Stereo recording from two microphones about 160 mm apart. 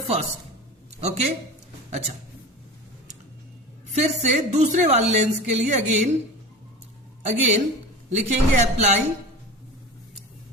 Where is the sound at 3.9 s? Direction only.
45° right (ahead or behind).